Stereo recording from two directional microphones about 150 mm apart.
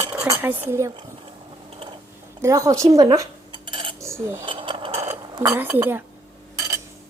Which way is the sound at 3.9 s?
20° right (ahead or behind).